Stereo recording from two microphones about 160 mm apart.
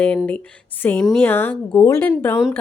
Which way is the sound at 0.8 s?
10° left (ahead or behind).